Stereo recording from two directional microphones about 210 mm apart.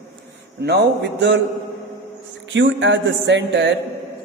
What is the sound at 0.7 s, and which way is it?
Music, 55° right (ahead or behind).